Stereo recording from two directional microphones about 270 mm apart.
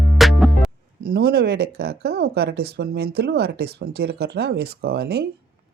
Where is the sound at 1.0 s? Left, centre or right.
Right.